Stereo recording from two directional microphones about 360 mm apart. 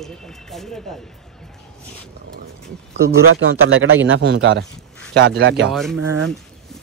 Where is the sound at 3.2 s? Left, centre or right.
Right.